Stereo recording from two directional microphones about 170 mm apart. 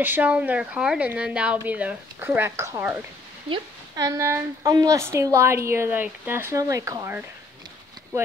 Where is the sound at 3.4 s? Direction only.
25° right (ahead or behind).